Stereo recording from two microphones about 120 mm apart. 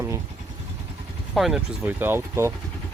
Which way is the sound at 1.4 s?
5° right (ahead or behind).